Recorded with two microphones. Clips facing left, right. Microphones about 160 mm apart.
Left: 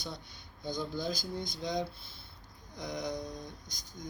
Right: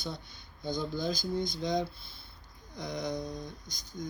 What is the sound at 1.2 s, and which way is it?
Speech, 40° left (ahead or behind).